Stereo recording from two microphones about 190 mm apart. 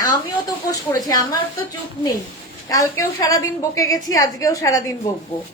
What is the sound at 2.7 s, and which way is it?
A woman's voice, 15° left (ahead or behind).